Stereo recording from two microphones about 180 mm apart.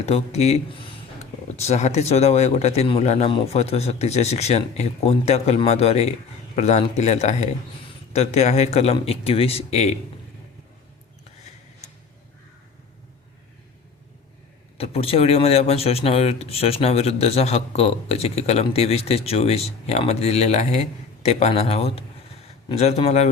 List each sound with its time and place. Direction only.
0.0 s speech: 35° left (ahead or behind)
14.8 s speech: 35° left (ahead or behind)